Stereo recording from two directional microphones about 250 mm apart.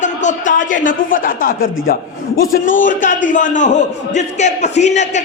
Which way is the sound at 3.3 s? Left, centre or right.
Left.